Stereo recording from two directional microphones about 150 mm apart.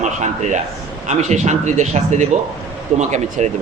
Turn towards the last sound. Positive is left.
turn(degrees=-50)  # may be behind; listen again after turning